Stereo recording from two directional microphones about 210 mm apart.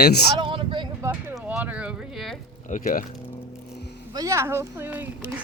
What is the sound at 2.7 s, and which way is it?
Speech, 40° left (ahead or behind).